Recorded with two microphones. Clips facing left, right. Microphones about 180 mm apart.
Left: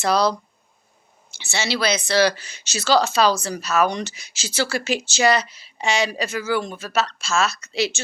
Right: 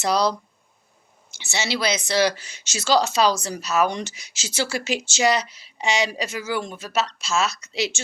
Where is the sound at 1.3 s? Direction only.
20° right (ahead or behind).